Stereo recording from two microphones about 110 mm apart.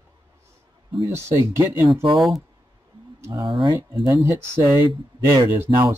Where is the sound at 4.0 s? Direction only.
30° right (ahead or behind).